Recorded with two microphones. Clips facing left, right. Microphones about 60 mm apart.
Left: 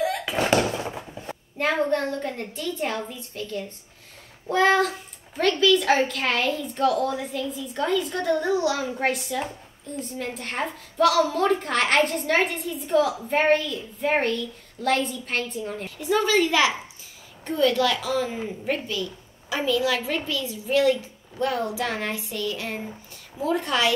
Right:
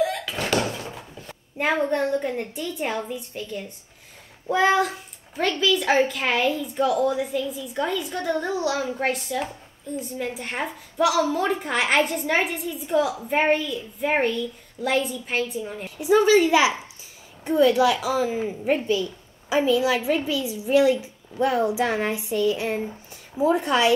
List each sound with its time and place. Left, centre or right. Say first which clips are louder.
0.2 s door: left 3 dB; left
1.6 s a woman's voice: right 1 dB; centre
9.9 s a woman's voice: right 2 dB; centre
16.0 s a child's voice: right 5 dB; centre